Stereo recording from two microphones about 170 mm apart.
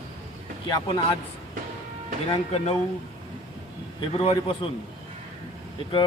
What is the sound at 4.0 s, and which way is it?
Speech, 30° left (ahead or behind).